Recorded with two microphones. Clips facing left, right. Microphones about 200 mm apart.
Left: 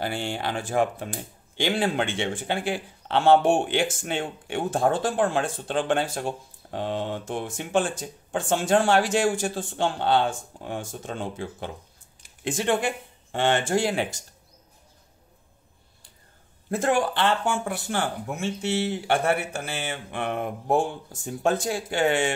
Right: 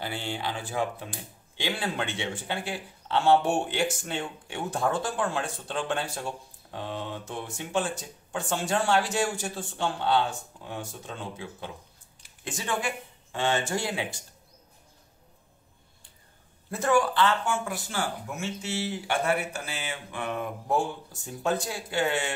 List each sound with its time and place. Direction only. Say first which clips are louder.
0.0 s speech: left 4 dB; 45° left (ahead or behind)
2.6 s speech: left 6 dB; 60° left (ahead or behind)
8.8 s speech: left 4 dB; 80° left
9.3 s speech: left 6 dB; 50° left (ahead or behind); by 13.9 s 65° left (ahead or behind)
16.7 s speech: left 1 dB; 55° left (ahead or behind)